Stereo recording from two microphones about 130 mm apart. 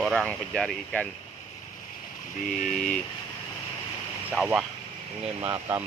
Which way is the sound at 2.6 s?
5° left (ahead or behind).